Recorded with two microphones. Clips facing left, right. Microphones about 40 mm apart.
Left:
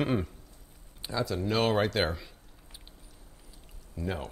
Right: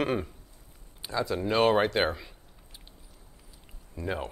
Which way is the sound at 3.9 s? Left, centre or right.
Centre.